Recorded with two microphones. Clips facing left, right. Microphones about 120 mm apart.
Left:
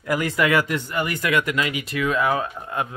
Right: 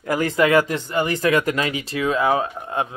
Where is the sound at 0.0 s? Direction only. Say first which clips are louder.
Right 3 dB; 35° right (ahead or behind).